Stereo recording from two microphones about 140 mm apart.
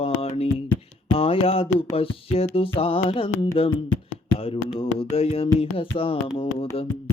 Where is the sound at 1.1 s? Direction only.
45° left (ahead or behind).